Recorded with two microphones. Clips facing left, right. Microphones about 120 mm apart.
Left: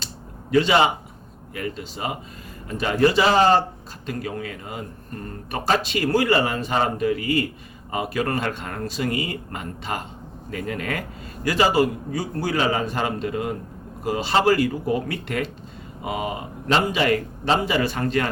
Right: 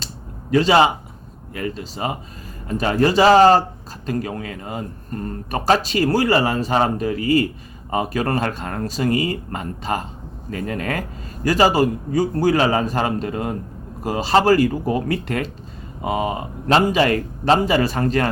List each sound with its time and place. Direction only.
0.5 s speech: 40° right (ahead or behind)